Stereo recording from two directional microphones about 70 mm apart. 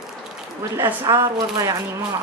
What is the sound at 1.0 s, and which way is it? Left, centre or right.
Speech, right.